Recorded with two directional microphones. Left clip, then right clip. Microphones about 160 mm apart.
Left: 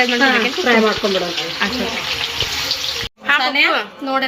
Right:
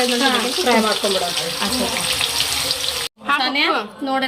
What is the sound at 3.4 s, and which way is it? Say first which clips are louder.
Speech: left 2 dB; 25° right (ahead or behind).